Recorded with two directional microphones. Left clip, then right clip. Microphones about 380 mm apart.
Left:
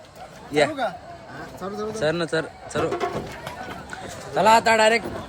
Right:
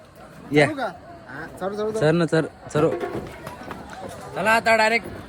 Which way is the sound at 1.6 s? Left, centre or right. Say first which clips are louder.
Right 3 dB; centre.